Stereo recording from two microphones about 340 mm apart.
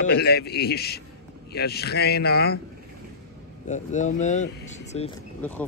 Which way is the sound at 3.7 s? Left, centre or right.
Left.